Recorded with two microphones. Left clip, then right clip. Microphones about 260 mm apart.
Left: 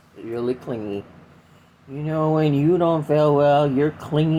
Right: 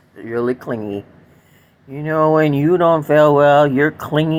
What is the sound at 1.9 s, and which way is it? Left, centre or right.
Speech, right.